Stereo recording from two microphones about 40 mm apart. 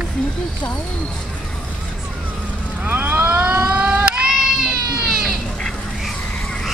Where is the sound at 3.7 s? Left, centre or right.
Right.